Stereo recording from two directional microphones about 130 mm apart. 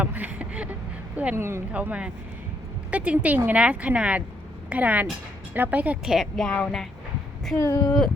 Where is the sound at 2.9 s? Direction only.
10° right (ahead or behind).